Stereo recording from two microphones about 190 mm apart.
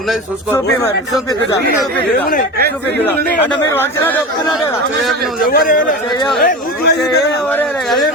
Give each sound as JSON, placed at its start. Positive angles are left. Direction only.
{"t": 3.1, "sound": "a man's voice", "side_deg": 10}
{"t": 5.5, "sound": "a man's voice", "side_deg": 50}
{"t": 6.4, "sound": "speech", "side_deg": 60}
{"t": 7.5, "sound": "a sound", "side_deg": 0}